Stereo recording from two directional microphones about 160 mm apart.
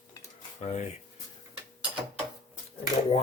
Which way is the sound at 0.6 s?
50° left (ahead or behind).